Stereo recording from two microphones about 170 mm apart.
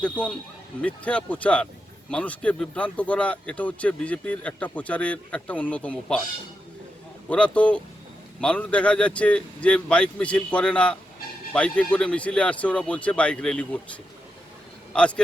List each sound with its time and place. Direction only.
0.0 s a man's voice: 5° left (ahead or behind)
7.3 s a man's voice: 5° left (ahead or behind)